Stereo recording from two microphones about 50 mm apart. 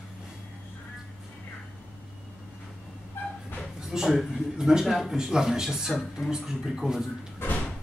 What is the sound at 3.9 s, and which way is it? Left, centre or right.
Speech, centre.